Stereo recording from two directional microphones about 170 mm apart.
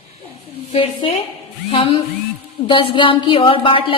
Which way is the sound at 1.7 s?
30° left (ahead or behind).